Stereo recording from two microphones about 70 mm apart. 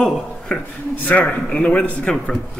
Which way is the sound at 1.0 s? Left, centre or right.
Left.